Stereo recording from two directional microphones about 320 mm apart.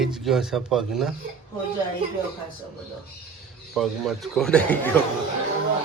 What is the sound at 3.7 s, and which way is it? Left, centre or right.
Speech, centre.